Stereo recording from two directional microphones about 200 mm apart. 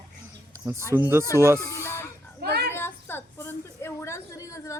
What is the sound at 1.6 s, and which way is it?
Speech, 15° left (ahead or behind).